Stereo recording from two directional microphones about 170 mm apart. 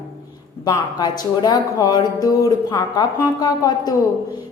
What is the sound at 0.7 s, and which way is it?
Speech, 25° left (ahead or behind).